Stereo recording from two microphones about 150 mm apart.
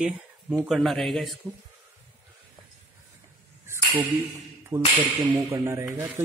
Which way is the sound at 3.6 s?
15° right (ahead or behind).